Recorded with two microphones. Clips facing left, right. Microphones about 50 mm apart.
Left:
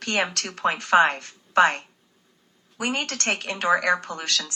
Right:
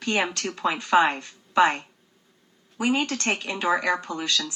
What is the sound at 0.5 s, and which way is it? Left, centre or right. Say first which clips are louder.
A woman's voice: left 2 dB; left.